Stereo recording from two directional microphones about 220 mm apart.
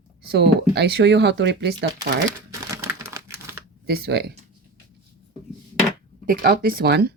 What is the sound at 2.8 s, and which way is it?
Typing, 10° right (ahead or behind).